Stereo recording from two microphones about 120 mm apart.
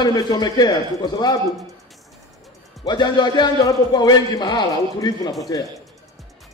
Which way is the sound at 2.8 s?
35° left (ahead or behind).